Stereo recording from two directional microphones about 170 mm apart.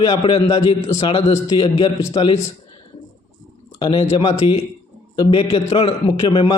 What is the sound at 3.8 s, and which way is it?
A man's voice, 35° left (ahead or behind).